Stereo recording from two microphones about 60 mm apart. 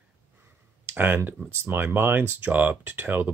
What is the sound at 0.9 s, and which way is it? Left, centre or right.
Speech, right.